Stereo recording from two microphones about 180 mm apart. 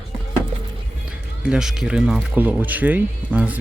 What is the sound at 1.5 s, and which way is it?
Speech, 5° right (ahead or behind).